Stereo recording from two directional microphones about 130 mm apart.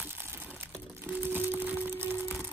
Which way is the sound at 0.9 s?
15° right (ahead or behind).